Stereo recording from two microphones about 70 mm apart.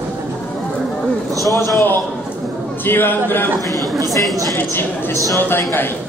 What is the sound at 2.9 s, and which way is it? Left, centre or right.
Speech, left.